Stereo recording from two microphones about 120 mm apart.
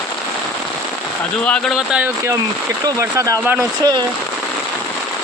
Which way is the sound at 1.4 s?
10° left (ahead or behind).